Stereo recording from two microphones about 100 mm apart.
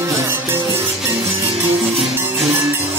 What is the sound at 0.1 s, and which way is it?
Music, 30° right (ahead or behind).